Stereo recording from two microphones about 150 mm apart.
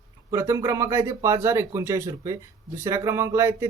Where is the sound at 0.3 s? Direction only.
20° right (ahead or behind).